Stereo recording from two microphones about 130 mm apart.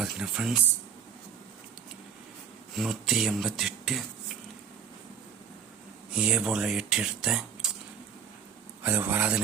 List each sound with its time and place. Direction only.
0.0 s speech: 5° right (ahead or behind)
2.7 s speech: centre (ahead or behind)
6.1 s speech: 5° right (ahead or behind)
8.8 s speech: 15° right (ahead or behind)